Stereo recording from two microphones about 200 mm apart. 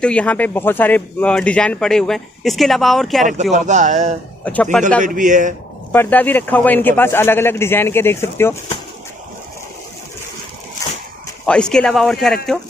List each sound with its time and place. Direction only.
0.0 s speech: 5° left (ahead or behind)
3.5 s speech: 35° right (ahead or behind)
4.5 s a man's voice: 5° left (ahead or behind)
5.0 s speech: 40° right (ahead or behind)
5.9 s a man's voice: 10° left (ahead or behind)
11.4 s speech: 5° left (ahead or behind)